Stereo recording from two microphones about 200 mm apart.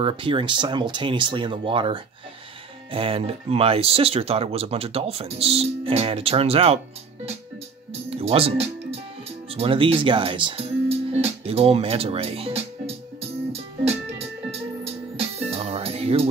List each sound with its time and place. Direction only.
0.0 s speech: 25° right (ahead or behind)
8.1 s music: 30° right (ahead or behind)
9.5 s speech: 25° right (ahead or behind)
13.5 s music: 30° right (ahead or behind)